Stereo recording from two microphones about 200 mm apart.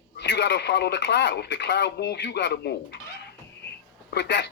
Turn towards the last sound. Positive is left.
turn(degrees=60)  # may be behind; listen again after turning